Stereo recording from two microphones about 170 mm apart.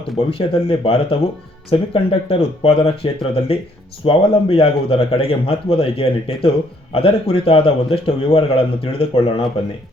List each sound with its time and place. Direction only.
0.3 s a man's voice: 30° left (ahead or behind)